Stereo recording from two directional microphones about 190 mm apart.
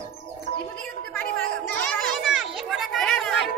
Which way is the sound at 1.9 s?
Centre (ahead or behind).